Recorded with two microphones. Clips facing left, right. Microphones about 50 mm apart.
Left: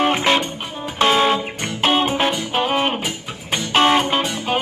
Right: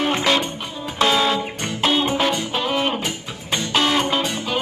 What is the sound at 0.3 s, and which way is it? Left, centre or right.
Music, left.